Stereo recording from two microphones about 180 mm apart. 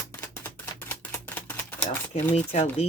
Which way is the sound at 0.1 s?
10° left (ahead or behind).